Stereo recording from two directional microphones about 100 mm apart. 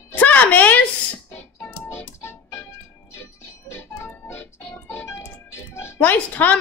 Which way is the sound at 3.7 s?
25° left (ahead or behind).